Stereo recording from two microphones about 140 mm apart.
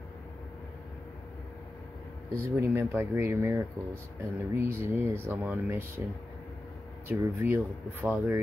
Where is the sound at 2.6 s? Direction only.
15° right (ahead or behind).